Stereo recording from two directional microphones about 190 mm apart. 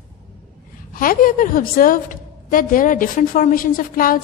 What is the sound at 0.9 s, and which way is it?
A woman's voice, 45° left (ahead or behind).